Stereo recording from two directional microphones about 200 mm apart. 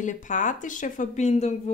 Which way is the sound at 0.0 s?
40° left (ahead or behind).